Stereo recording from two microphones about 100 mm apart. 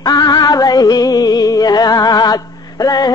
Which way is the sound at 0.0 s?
40° left (ahead or behind).